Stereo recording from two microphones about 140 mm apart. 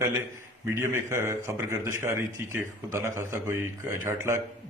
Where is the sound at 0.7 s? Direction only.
20° right (ahead or behind).